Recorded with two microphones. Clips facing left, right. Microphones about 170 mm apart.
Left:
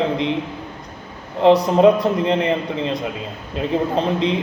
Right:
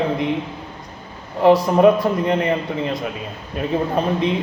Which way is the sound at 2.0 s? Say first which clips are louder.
Left 1 dB; 20° left (ahead or behind).